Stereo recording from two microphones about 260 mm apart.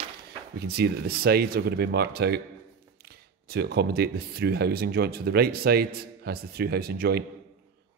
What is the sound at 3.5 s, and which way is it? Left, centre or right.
Speech, right.